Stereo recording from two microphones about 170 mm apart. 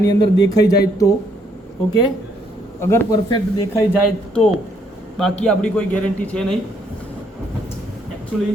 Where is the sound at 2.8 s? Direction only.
15° left (ahead or behind).